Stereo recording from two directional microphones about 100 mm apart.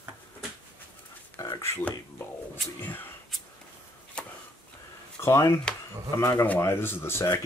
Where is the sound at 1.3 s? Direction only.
35° left (ahead or behind).